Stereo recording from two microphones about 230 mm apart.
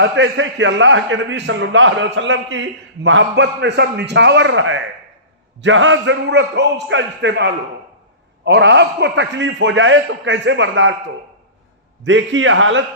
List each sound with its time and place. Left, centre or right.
0.0 s a man's voice: right
12.0 s a man's voice: right